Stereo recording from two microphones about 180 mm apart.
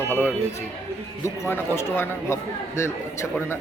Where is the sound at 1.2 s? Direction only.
15° left (ahead or behind).